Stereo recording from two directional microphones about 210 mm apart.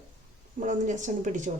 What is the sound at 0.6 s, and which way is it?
Speech, 35° right (ahead or behind).